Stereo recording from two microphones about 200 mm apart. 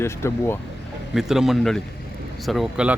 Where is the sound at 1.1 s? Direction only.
Centre (ahead or behind).